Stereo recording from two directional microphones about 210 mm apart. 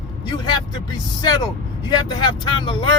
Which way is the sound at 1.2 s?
20° left (ahead or behind).